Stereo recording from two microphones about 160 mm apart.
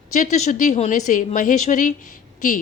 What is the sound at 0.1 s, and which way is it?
A woman's voice, 45° left (ahead or behind).